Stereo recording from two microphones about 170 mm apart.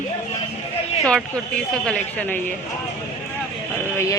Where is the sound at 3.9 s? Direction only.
15° left (ahead or behind).